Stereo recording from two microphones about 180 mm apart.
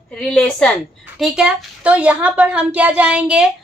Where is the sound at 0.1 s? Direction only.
5° left (ahead or behind).